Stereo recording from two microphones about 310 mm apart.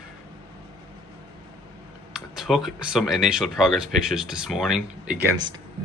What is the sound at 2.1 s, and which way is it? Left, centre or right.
Speech, centre.